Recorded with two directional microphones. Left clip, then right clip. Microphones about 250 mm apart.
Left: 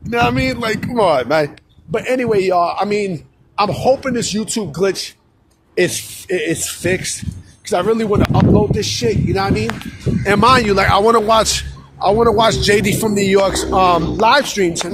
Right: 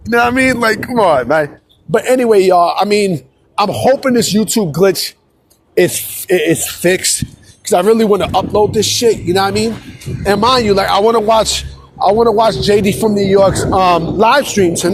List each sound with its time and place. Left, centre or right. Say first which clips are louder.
0.0 s a man's voice: right 5 dB; right
0.8 s a man's voice: right 3 dB; centre
1.9 s a man's voice: right 6 dB; right
7.6 s a man's voice: right 6 dB; right
10.2 s a man's voice: right 1 dB; centre; by 14.8 s right